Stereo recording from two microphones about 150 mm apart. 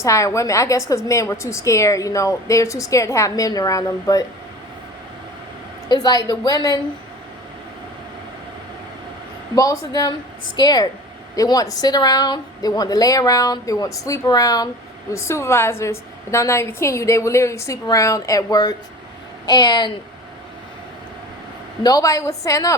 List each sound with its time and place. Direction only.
0.0 s a woman's voice: 20° left (ahead or behind)
5.9 s a woman's voice: 25° left (ahead or behind)
9.6 s a woman's voice: 25° left (ahead or behind)
21.8 s a woman's voice: 25° left (ahead or behind)